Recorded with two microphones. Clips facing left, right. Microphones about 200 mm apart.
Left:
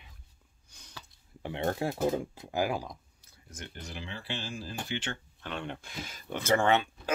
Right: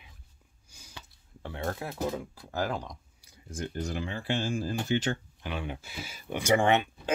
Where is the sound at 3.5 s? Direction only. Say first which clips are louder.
Right 10 dB; 35° right (ahead or behind).